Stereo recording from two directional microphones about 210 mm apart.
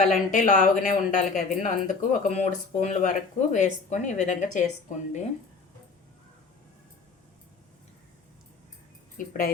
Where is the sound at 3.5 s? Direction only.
35° left (ahead or behind).